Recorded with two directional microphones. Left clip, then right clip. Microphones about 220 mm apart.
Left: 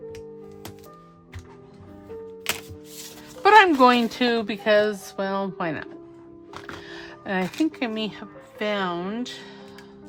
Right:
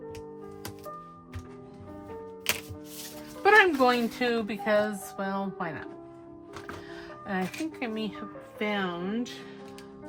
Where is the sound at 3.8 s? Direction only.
30° left (ahead or behind).